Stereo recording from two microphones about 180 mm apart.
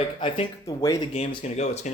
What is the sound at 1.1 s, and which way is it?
Speech, 35° left (ahead or behind).